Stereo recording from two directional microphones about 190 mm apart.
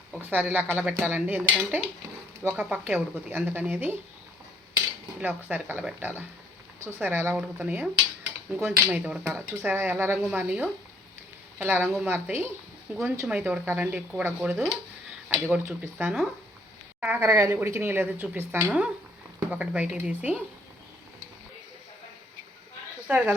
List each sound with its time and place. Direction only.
0.2 s speech: 10° right (ahead or behind)
5.2 s speech: 10° right (ahead or behind)
23.0 s speech: 5° right (ahead or behind)